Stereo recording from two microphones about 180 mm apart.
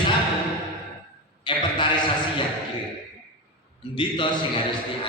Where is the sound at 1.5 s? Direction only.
25° left (ahead or behind).